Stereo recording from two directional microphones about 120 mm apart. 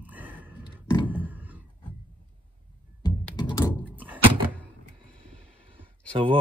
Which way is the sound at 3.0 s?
35° left (ahead or behind).